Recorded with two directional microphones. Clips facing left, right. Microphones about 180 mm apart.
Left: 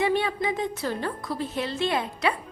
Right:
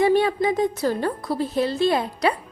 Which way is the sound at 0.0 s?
40° right (ahead or behind).